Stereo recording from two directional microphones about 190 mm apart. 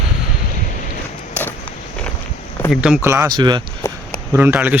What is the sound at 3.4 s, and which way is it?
Speech, 25° right (ahead or behind).